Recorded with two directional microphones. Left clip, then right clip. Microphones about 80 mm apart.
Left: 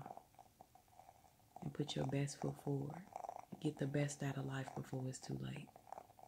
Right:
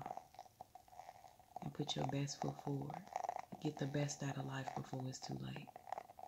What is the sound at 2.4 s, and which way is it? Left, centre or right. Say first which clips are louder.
Speech: even; centre.